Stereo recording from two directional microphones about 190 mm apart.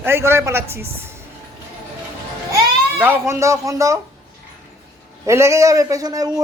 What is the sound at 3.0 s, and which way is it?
Speech, 10° right (ahead or behind).